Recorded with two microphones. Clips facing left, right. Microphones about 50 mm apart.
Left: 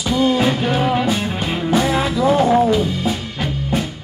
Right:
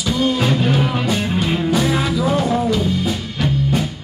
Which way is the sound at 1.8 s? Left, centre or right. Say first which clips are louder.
Left 1 dB; centre.